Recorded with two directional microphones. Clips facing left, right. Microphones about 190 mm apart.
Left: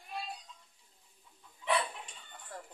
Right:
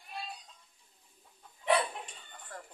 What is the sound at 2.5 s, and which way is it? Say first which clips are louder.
Music: even; 5° left (ahead or behind).